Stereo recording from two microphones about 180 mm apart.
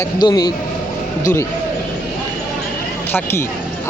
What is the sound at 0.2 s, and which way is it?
Speech, 25° left (ahead or behind).